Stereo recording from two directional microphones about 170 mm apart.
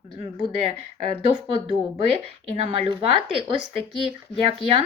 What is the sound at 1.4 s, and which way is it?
Speech, 35° right (ahead or behind).